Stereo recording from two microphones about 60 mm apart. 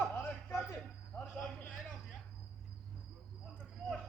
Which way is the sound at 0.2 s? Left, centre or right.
Left.